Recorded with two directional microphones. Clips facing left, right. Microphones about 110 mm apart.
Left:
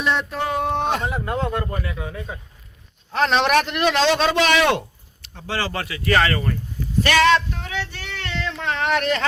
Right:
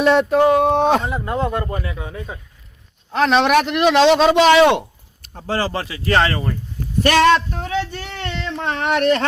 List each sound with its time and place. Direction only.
0.0 s speech: 65° right (ahead or behind); by 1.0 s 90° right
1.0 s speech: centre (ahead or behind)
1.7 s speech: 25° right (ahead or behind)
3.1 s a man's voice: 5° right (ahead or behind); by 4.9 s 20° right (ahead or behind)
5.2 s speech: 40° right (ahead or behind)
7.0 s speech: 45° right (ahead or behind)
8.1 s speech: 30° right (ahead or behind); by 9.2 s 45° right (ahead or behind)